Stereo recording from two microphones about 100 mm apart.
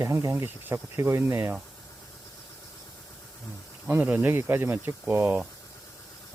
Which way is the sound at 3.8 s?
20° right (ahead or behind).